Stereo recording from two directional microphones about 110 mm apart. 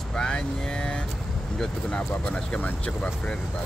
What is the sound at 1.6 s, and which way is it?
Speech, 10° left (ahead or behind).